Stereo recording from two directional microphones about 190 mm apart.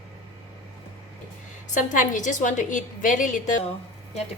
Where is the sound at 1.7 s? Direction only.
40° left (ahead or behind).